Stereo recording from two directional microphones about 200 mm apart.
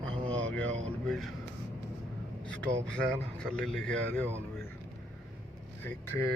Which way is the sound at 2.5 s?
5° left (ahead or behind).